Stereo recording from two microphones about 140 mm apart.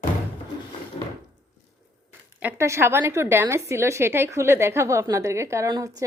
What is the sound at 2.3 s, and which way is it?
A woman's voice, 15° right (ahead or behind).